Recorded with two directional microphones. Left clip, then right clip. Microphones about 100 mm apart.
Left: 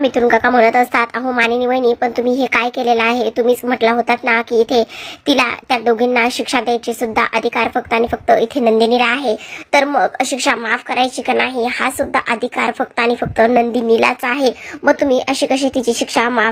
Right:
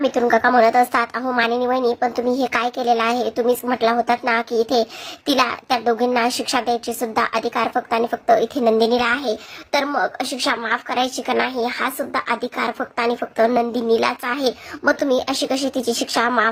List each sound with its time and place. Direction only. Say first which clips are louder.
0.0 s a woman's voice: left 4 dB; 15° left (ahead or behind)
9.3 s a woman's voice: left 7 dB; 30° left (ahead or behind)
10.8 s a woman's voice: left 5 dB; 10° left (ahead or behind)
11.4 s a woman's voice: left 5 dB; 25° left (ahead or behind)
14.8 s a woman's voice: left 5 dB; 15° left (ahead or behind)